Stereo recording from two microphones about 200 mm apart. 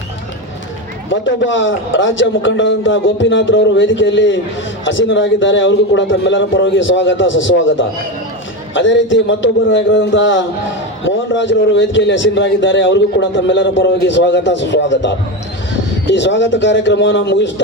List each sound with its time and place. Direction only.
1.1 s a man's voice: 65° left (ahead or behind)